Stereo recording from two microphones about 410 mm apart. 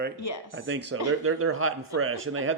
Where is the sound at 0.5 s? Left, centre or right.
Right.